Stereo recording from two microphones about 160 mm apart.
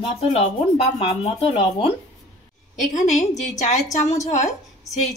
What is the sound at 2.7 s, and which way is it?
A woman's voice, 45° left (ahead or behind).